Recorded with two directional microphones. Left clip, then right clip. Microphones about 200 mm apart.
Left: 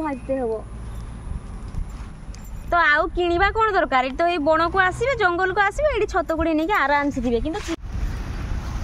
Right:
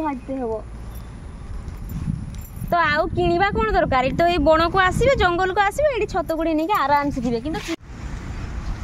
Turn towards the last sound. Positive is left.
turn(degrees=0)  # may be behind; listen again after turning